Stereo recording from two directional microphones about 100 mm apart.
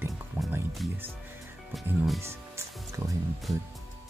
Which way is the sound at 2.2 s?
25° right (ahead or behind).